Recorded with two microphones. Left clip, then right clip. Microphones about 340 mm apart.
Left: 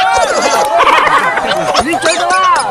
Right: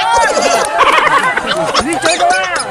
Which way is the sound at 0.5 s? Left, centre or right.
Centre.